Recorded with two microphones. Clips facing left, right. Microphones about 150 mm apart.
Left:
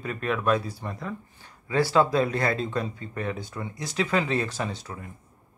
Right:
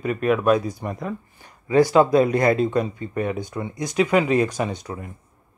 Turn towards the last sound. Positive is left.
turn(degrees=-15)  # may be behind; listen again after turning